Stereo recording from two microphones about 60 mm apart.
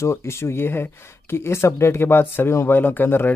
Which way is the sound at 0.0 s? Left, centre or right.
Left.